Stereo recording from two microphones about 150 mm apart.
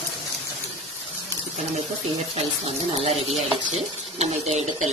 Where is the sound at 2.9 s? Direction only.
40° right (ahead or behind).